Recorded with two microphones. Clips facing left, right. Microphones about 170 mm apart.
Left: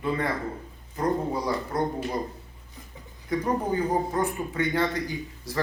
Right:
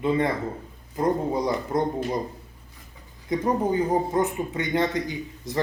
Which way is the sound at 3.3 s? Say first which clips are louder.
Right 3 dB; 20° right (ahead or behind).